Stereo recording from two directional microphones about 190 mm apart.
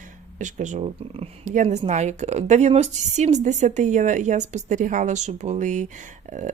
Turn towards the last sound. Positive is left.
turn(degrees=-40)  # may be behind; listen again after turning